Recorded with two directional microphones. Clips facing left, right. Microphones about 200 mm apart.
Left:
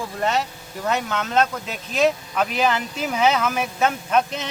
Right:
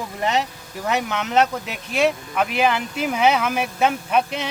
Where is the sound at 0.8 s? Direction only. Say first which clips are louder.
Right 1 dB; 15° right (ahead or behind).